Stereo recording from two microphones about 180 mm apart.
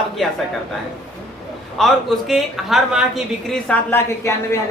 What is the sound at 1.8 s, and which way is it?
Speech, centre (ahead or behind).